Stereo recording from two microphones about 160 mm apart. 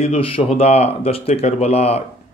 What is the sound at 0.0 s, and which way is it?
Speech, 35° left (ahead or behind).